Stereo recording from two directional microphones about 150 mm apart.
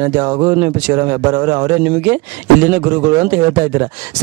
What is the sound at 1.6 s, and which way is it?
Speech, 15° right (ahead or behind).